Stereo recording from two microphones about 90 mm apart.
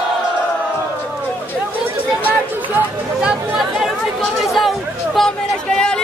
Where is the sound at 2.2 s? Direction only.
20° right (ahead or behind).